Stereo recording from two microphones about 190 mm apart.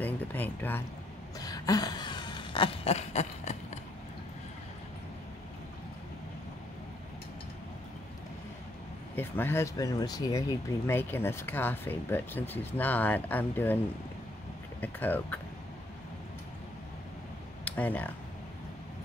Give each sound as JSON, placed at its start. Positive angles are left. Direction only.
{"t": 0.0, "sound": "speech", "side_deg": 10}
{"t": 1.4, "sound": "a sound", "side_deg": 20}
{"t": 9.1, "sound": "speech", "side_deg": 10}
{"t": 14.8, "sound": "speech", "side_deg": 10}
{"t": 17.6, "sound": "speech", "side_deg": 10}